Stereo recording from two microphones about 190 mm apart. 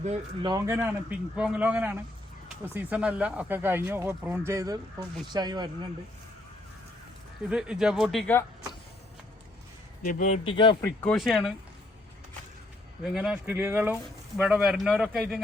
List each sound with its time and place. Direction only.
0.4 s speech: 15° right (ahead or behind)
7.5 s a man's voice: 5° right (ahead or behind)
10.0 s a man's voice: 45° left (ahead or behind)
10.4 s speech: 25° left (ahead or behind)
10.8 s a man's voice: 10° left (ahead or behind)
13.0 s a man's voice: 5° right (ahead or behind)